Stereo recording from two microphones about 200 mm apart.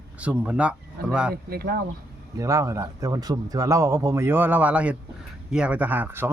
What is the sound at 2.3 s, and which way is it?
A man's voice, 15° right (ahead or behind).